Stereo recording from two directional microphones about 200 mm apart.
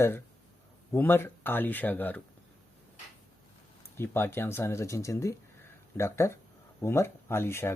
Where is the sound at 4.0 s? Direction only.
10° left (ahead or behind).